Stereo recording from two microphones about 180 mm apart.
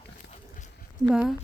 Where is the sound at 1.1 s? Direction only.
5° right (ahead or behind).